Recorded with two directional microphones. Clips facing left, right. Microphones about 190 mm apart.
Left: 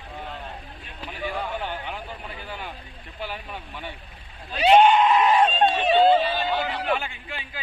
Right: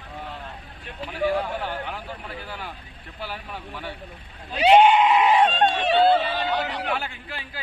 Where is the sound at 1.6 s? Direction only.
20° left (ahead or behind).